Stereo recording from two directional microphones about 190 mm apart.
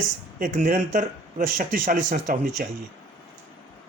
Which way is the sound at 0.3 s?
45° right (ahead or behind).